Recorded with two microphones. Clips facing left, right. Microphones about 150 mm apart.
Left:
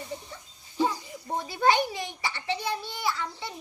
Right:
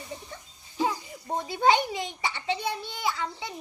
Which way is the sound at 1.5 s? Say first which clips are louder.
Right 1 dB; 20° right (ahead or behind).